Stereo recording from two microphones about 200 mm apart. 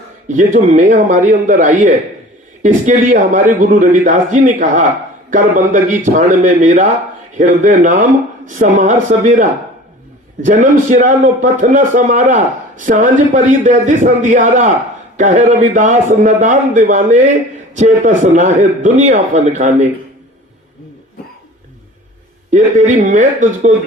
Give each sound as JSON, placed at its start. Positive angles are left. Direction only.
{"t": 0.3, "sound": "a man's voice", "side_deg": -40}
{"t": 22.4, "sound": "a man's voice", "side_deg": -40}